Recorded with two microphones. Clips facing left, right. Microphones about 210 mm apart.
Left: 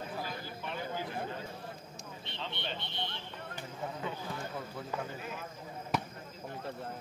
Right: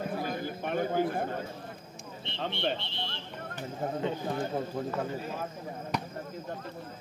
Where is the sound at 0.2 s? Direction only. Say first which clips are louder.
Right 7 dB; 55° right (ahead or behind).